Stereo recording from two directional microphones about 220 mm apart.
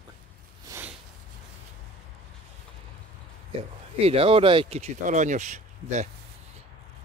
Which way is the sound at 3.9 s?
25° right (ahead or behind).